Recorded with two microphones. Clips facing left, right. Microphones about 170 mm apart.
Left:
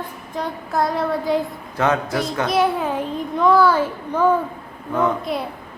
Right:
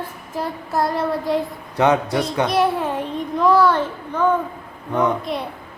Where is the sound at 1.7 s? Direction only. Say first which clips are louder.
Right 3 dB; 20° right (ahead or behind).